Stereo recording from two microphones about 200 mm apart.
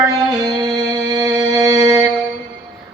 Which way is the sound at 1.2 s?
15° right (ahead or behind).